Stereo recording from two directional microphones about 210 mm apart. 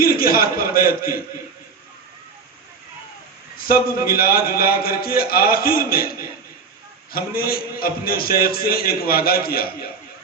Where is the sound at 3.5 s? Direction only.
45° left (ahead or behind).